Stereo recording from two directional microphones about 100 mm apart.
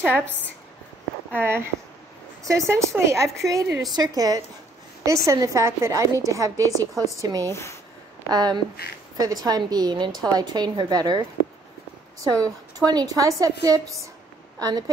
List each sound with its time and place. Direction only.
0.0 s a woman's voice: 10° left (ahead or behind)
1.3 s a woman's voice: 25° right (ahead or behind); by 14.9 s 40° right (ahead or behind)